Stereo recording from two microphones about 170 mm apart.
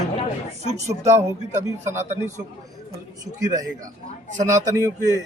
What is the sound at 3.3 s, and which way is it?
Speech, 20° right (ahead or behind).